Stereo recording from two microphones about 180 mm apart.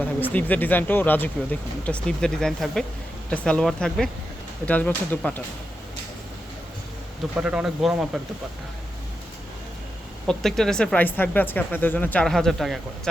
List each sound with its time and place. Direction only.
0.0 s speech: 10° left (ahead or behind)
7.3 s speech: 5° right (ahead or behind)
10.2 s speech: centre (ahead or behind)